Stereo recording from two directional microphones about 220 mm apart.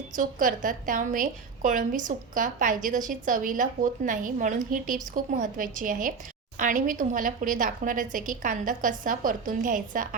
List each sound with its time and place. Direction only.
0.2 s a woman's voice: 35° right (ahead or behind)